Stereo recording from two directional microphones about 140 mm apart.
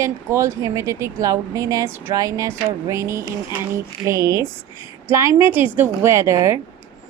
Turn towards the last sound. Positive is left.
turn(degrees=-20)  # may be behind; listen again after turning